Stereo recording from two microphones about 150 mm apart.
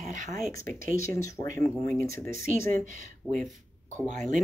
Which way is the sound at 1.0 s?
20° left (ahead or behind).